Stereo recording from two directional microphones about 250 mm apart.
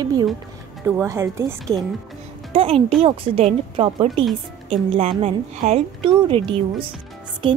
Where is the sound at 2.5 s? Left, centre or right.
Right.